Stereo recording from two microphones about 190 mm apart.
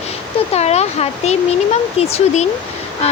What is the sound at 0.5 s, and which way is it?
Speech, 35° left (ahead or behind).